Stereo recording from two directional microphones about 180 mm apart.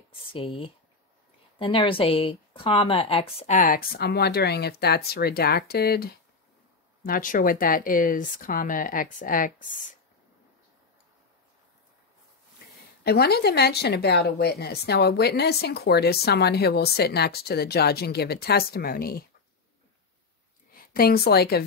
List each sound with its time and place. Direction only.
0.3 s speech: 30° left (ahead or behind); by 9.9 s 50° left (ahead or behind)
13.0 s speech: 60° left (ahead or behind)
20.7 s a woman's voice: 55° left (ahead or behind)